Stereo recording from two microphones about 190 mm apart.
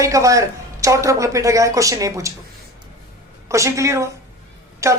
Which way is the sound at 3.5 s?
15° right (ahead or behind).